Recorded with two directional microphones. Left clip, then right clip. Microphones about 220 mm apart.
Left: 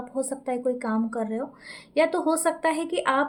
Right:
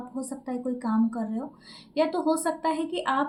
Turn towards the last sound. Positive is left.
turn(degrees=45)  # may be behind; listen again after turning